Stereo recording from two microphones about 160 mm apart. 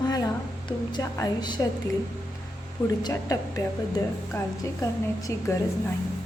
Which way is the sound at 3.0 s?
20° left (ahead or behind).